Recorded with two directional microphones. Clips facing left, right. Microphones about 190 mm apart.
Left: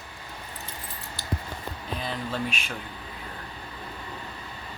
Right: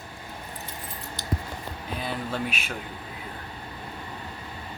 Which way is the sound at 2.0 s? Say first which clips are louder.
Right 1 dB; 10° right (ahead or behind).